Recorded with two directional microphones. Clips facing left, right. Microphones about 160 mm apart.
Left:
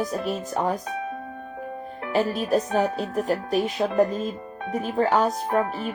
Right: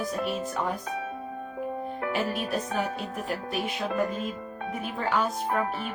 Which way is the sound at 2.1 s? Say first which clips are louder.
Left 9 dB; 40° left (ahead or behind).